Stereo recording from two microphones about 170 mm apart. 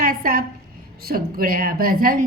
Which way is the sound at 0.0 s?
55° right (ahead or behind).